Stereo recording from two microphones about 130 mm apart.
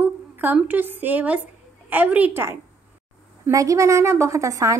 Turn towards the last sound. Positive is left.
turn(degrees=-25)  # may be behind; listen again after turning